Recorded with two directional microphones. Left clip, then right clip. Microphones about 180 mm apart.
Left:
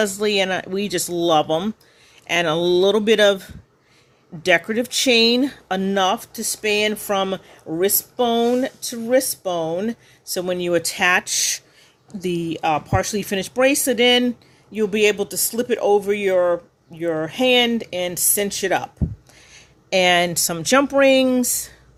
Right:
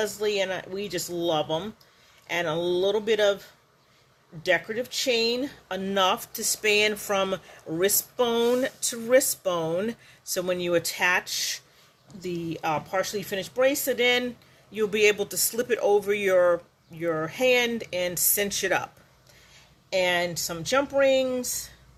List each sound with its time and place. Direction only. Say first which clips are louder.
0.0 s speech: left 7 dB; 40° left (ahead or behind)
4.4 s speech: left 7 dB; 45° left (ahead or behind); by 18.9 s 25° left (ahead or behind)
19.5 s speech: left 7 dB; 45° left (ahead or behind)